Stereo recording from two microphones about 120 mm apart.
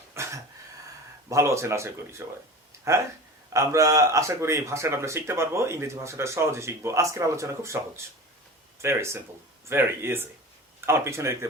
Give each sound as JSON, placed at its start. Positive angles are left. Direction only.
{"t": 0.1, "sound": "throat clearing", "side_deg": -25}
{"t": 1.3, "sound": "speech", "side_deg": -25}